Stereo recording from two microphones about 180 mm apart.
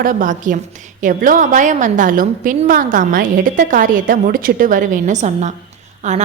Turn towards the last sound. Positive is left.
turn(degrees=-40)  # may be behind; listen again after turning